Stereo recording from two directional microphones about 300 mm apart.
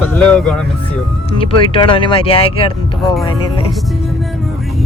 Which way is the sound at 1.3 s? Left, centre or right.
Centre.